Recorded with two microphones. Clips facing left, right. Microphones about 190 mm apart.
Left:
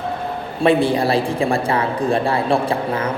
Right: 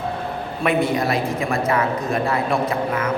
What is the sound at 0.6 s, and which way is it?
A man's voice, 30° left (ahead or behind).